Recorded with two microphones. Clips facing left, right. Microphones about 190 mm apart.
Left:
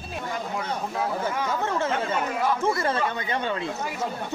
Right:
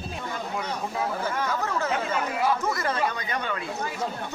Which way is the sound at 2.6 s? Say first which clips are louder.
Left 2 dB; 25° left (ahead or behind).